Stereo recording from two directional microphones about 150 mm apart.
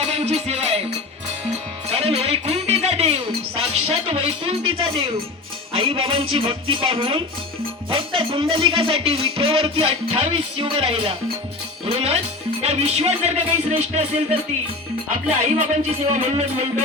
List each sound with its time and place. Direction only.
0.0 s music: 45° right (ahead or behind)
5.7 s speech: 35° right (ahead or behind)
7.9 s music: 35° right (ahead or behind)